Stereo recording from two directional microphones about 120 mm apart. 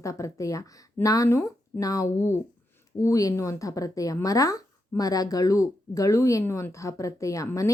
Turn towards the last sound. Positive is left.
turn(degrees=25)  # may be behind; listen again after turning